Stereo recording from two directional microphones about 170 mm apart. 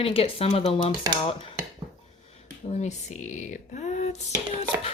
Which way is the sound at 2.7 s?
45° left (ahead or behind).